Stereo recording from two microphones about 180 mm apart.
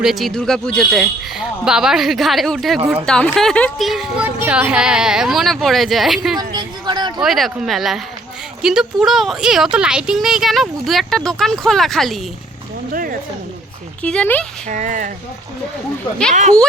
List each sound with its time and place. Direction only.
0.0 s speech: centre (ahead or behind)
2.7 s speech: 15° right (ahead or behind)
3.1 s speech: 5° left (ahead or behind)
6.5 s a sound: 25° right (ahead or behind)
7.2 s speech: centre (ahead or behind)
12.9 s speech: 50° right (ahead or behind)
14.0 s speech: 5° left (ahead or behind)
14.7 s speech: 45° right (ahead or behind)